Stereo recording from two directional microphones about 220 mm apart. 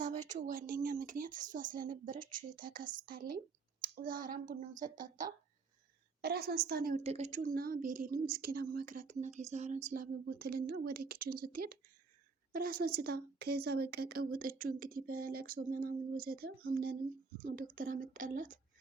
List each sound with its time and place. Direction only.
0.0 s speech: 35° right (ahead or behind)
6.2 s speech: 45° right (ahead or behind)
7.0 s speech: 30° right (ahead or behind)